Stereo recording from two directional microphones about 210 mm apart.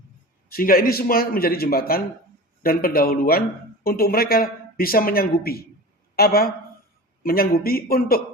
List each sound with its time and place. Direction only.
0.5 s speech: 45° left (ahead or behind)